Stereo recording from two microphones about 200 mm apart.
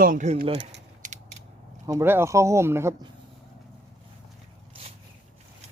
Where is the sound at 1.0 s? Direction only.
40° right (ahead or behind).